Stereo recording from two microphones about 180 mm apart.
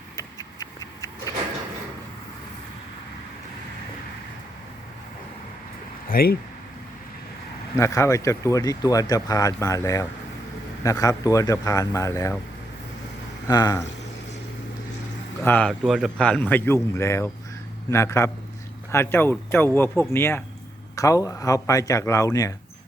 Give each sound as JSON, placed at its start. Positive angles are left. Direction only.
{"t": 0.2, "sound": "a sound", "side_deg": 20}
{"t": 6.1, "sound": "speech", "side_deg": 55}
{"t": 7.8, "sound": "speech", "side_deg": 15}
{"t": 13.5, "sound": "speech", "side_deg": 20}
{"t": 15.4, "sound": "speech", "side_deg": 10}
{"t": 15.8, "sound": "speech", "side_deg": 0}